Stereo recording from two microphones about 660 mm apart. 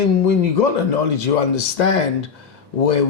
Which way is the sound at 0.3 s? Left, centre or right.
Left.